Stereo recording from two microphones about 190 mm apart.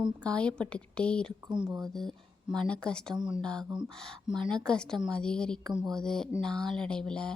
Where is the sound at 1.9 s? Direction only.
Centre (ahead or behind).